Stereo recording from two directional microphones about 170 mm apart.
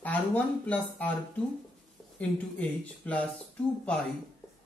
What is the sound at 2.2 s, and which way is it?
A man's voice, 10° left (ahead or behind).